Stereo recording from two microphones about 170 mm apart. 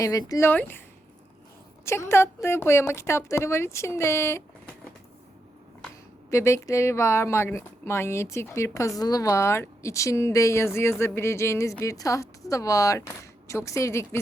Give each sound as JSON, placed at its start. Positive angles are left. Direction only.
{"t": 0.0, "sound": "speech", "side_deg": 20}
{"t": 1.8, "sound": "speech", "side_deg": 15}
{"t": 6.3, "sound": "speech", "side_deg": 15}